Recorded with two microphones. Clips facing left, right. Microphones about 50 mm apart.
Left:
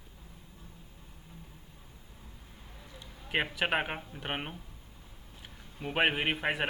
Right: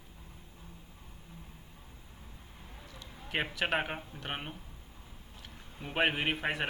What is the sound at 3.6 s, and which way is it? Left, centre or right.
A man's voice, centre.